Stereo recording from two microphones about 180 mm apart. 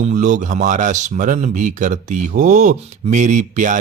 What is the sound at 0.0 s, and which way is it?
Speech, 45° right (ahead or behind).